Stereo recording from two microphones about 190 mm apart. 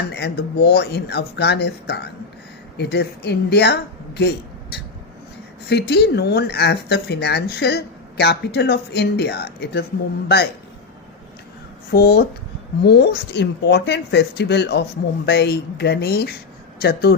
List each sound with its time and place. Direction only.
0.1 s speech: 60° left (ahead or behind)
4.2 s a sound: 60° left (ahead or behind)
5.6 s speech: 60° left (ahead or behind)
11.9 s speech: 55° left (ahead or behind)